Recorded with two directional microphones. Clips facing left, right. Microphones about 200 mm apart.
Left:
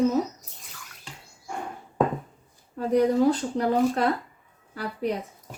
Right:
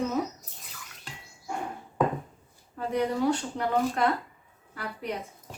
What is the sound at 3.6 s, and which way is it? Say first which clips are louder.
A woman's voice: left 4 dB; 40° left (ahead or behind).